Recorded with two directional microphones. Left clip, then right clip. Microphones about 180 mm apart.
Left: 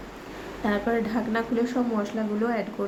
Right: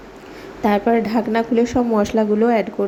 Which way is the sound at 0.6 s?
30° right (ahead or behind).